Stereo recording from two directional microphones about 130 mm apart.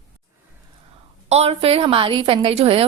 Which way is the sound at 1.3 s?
55° right (ahead or behind).